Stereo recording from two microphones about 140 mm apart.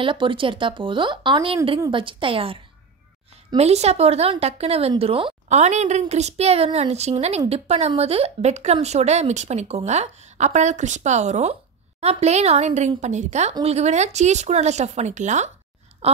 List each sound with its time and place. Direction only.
0.0 s speech: 35° right (ahead or behind)
3.5 s a woman's voice: 50° right (ahead or behind)
5.5 s a woman's voice: 55° right (ahead or behind)
16.0 s speech: 45° right (ahead or behind)